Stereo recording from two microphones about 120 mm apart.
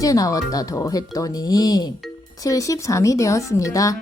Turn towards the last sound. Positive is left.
turn(degrees=25)  # may be behind; listen again after turning